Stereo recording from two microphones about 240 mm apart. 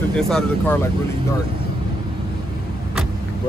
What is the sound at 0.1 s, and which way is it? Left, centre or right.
Speech, centre.